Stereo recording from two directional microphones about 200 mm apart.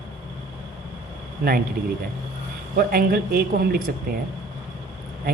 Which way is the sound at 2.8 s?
45° right (ahead or behind).